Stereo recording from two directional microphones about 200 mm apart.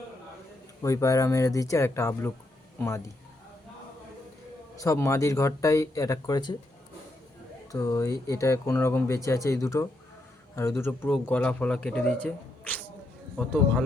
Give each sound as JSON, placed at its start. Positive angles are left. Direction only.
{"t": 0.8, "sound": "speech", "side_deg": 15}
{"t": 4.8, "sound": "speech", "side_deg": 15}
{"t": 7.7, "sound": "speech", "side_deg": 15}
{"t": 12.2, "sound": "a sound", "side_deg": 10}
{"t": 13.4, "sound": "speech", "side_deg": 0}